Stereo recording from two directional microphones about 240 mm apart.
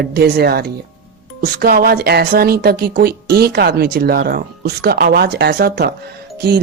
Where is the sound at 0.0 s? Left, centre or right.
Right.